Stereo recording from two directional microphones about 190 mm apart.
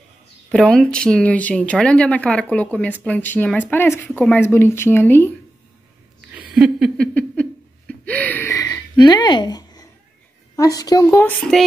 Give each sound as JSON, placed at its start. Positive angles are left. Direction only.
{"t": 0.5, "sound": "speech", "side_deg": 5}
{"t": 6.3, "sound": "a sound", "side_deg": 0}
{"t": 8.1, "sound": "gasp", "side_deg": 10}
{"t": 10.5, "sound": "speech", "side_deg": 20}